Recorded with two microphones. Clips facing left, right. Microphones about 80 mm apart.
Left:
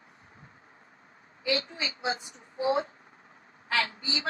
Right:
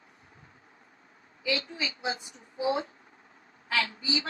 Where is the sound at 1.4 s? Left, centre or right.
Left.